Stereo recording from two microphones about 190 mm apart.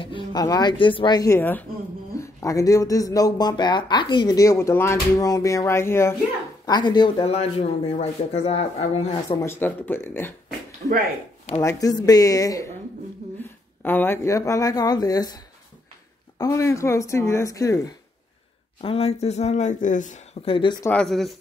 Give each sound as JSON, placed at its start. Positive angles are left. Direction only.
{"t": 0.0, "sound": "speech", "side_deg": 25}
{"t": 9.4, "sound": "speech", "side_deg": 10}
{"t": 10.8, "sound": "speech", "side_deg": -45}
{"t": 11.6, "sound": "speech", "side_deg": 20}
{"t": 18.8, "sound": "speech", "side_deg": 30}
{"t": 20.8, "sound": "speech", "side_deg": 5}